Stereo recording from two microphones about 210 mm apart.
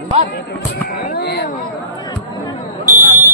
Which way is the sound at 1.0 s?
50° left (ahead or behind).